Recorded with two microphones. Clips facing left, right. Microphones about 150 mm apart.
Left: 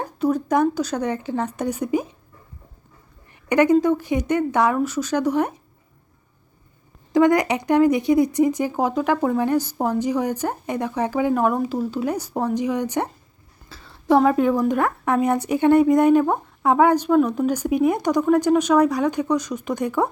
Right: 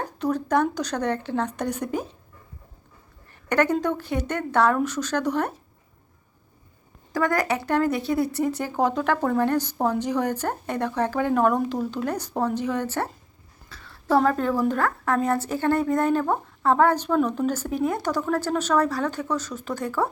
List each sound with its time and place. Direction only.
0.0 s speech: 10° left (ahead or behind)
3.5 s speech: 10° left (ahead or behind)
7.1 s speech: 20° left (ahead or behind)
13.7 s a sound: 30° left (ahead or behind)
14.2 s speech: 10° left (ahead or behind)